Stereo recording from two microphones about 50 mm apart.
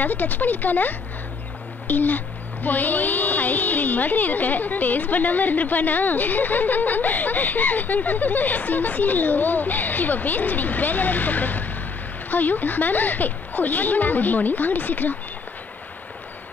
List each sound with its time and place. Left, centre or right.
0.0 s a woman's voice: left